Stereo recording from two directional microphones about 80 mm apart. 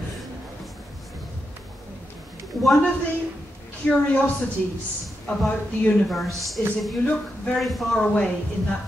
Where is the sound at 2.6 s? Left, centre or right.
Centre.